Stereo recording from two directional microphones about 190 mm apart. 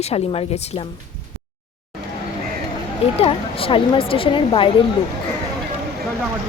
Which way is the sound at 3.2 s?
30° left (ahead or behind).